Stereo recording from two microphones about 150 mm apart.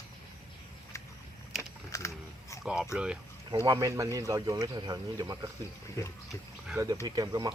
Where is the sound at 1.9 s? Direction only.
20° left (ahead or behind).